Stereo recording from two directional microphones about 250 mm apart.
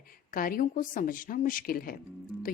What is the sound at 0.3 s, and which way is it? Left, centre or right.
A woman's voice, left.